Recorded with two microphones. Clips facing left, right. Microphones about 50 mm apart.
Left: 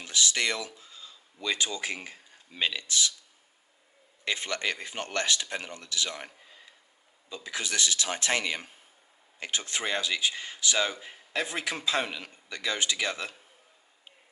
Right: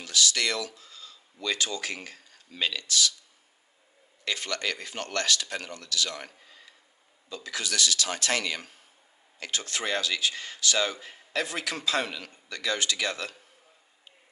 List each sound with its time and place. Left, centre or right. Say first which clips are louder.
0.0 s speech: right 1 dB; left
4.2 s speech: even; left